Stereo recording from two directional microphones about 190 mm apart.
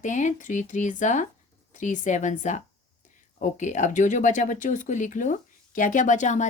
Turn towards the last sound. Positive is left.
turn(degrees=40)  # may be behind; listen again after turning